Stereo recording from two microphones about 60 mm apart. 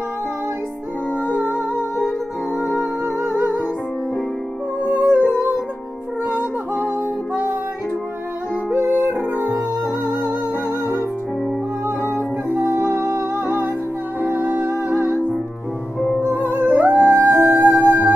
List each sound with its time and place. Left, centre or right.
1.2 s music: left
2.8 s music: right
4.8 s music: right
8.6 s music: right
10.0 s music: right
12.1 s music: right
14.2 s music: right
16.2 s music: right